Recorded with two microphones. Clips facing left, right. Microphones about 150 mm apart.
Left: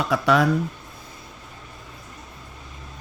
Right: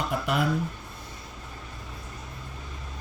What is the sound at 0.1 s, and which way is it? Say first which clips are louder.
Speech: left 11 dB; 90° left.